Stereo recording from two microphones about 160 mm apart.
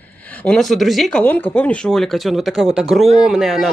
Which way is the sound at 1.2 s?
10° left (ahead or behind).